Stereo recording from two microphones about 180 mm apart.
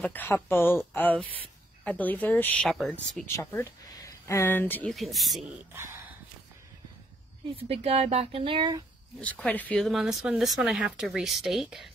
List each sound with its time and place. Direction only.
0.0 s speech: 10° left (ahead or behind)
4.3 s speech: 10° left (ahead or behind)
5.7 s speech: 15° right (ahead or behind)
7.5 s speech: 30° right (ahead or behind)
9.2 s speech: 10° left (ahead or behind)